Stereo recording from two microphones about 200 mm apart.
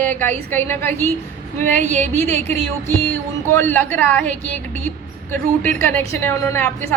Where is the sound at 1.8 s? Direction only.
35° right (ahead or behind).